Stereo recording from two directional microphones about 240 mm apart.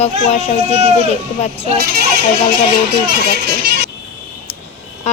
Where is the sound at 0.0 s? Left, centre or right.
Left.